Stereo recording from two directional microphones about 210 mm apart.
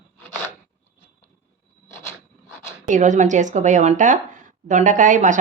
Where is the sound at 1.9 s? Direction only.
10° left (ahead or behind).